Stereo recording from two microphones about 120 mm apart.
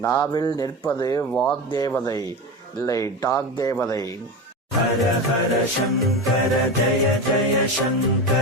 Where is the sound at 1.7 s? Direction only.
30° left (ahead or behind).